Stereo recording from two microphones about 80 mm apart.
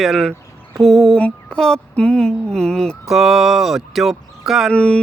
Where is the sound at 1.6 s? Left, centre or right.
Centre.